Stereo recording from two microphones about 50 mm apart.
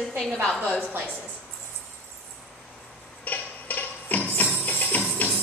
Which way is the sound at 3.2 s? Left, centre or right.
Left.